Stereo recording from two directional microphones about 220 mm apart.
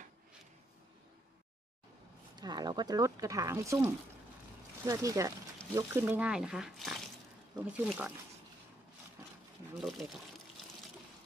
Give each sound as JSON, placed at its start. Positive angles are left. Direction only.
{"t": 2.3, "sound": "speech", "side_deg": -20}
{"t": 9.8, "sound": "speech", "side_deg": 0}